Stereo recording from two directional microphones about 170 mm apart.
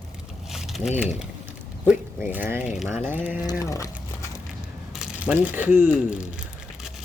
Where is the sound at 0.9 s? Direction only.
5° right (ahead or behind).